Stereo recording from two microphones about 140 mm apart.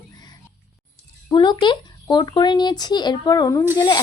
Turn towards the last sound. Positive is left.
turn(degrees=30)  # may be behind; listen again after turning